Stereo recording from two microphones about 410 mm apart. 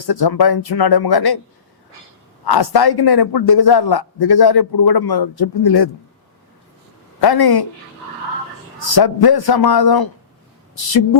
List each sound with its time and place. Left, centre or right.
0.0 s a man's voice: left
2.4 s a man's voice: left
7.2 s a man's voice: left
8.8 s a man's voice: left